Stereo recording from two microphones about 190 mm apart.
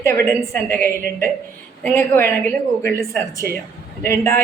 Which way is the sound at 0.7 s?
10° left (ahead or behind).